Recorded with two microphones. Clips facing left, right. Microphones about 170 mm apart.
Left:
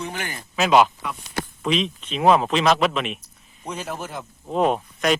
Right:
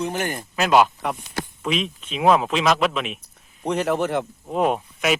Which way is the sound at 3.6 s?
70° right (ahead or behind).